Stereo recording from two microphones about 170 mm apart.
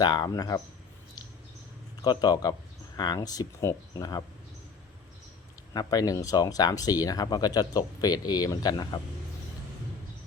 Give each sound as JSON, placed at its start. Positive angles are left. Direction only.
{"t": 0.0, "sound": "speech", "side_deg": 25}
{"t": 2.0, "sound": "speech", "side_deg": 25}
{"t": 5.7, "sound": "speech", "side_deg": 20}